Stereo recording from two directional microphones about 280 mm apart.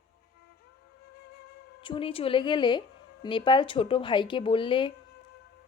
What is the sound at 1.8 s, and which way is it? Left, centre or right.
A man's voice, centre.